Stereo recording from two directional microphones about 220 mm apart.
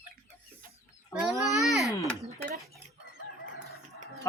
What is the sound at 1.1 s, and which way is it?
Speech, centre (ahead or behind).